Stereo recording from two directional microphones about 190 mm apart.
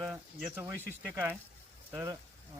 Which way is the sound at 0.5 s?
10° right (ahead or behind).